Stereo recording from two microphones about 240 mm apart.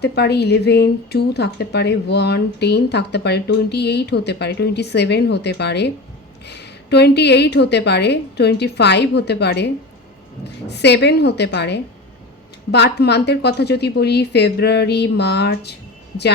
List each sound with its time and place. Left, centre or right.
0.0 s speech: left